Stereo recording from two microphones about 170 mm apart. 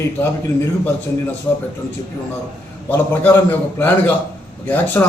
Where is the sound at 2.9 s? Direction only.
10° left (ahead or behind).